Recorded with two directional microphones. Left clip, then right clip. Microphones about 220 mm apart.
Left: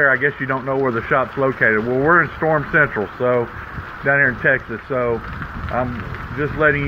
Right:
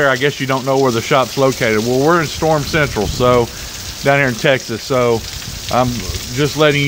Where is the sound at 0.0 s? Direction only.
35° right (ahead or behind).